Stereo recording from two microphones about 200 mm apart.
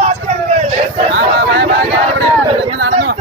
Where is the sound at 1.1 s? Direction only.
65° right (ahead or behind).